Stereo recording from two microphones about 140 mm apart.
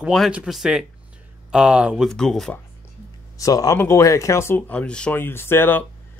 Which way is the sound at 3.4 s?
25° left (ahead or behind).